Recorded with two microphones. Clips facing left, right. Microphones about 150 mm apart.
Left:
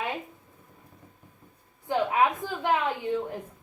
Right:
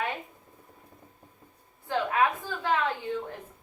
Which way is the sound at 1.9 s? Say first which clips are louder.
Left 2 dB; 15° left (ahead or behind).